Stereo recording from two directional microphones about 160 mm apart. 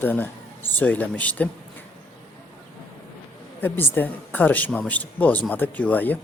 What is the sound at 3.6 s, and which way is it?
Speech, 10° left (ahead or behind).